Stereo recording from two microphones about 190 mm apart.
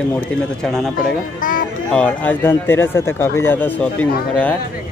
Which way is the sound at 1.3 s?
45° left (ahead or behind).